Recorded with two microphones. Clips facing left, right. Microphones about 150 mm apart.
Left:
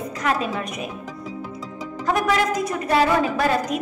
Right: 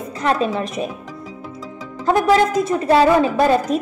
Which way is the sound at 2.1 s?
30° right (ahead or behind).